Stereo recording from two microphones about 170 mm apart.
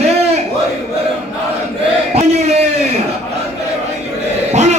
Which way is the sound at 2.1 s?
40° right (ahead or behind).